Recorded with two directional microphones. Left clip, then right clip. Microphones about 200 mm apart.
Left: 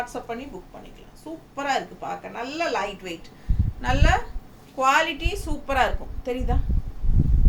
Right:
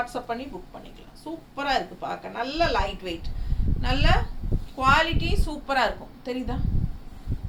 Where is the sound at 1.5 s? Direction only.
10° left (ahead or behind).